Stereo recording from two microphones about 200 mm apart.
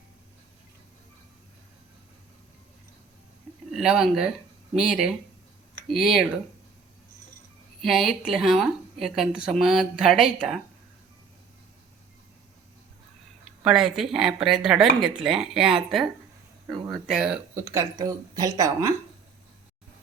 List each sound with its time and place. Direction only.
3.7 s speech: centre (ahead or behind)
7.9 s speech: centre (ahead or behind)
13.7 s speech: centre (ahead or behind)